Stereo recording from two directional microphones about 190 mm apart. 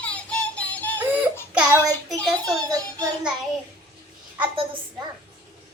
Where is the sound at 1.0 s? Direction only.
10° right (ahead or behind).